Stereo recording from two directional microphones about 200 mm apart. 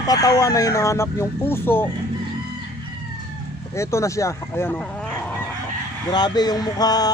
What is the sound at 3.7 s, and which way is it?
Speech, 15° left (ahead or behind).